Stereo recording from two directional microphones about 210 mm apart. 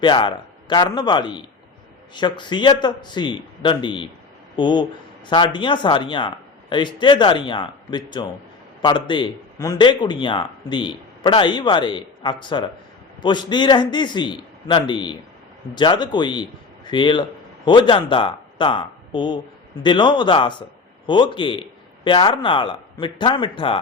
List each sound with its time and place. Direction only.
0.0 s a man's voice: 20° left (ahead or behind)